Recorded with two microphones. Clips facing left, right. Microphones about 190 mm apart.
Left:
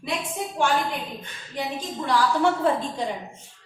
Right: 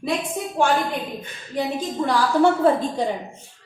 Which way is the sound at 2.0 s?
50° right (ahead or behind).